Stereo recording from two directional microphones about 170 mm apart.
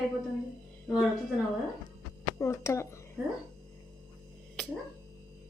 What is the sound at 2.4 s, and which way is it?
Speech, 15° left (ahead or behind).